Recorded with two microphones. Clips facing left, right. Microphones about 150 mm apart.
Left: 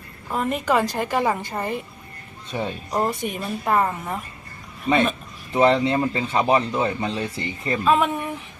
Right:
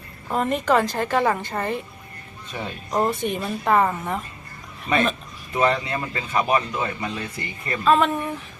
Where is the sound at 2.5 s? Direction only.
25° left (ahead or behind).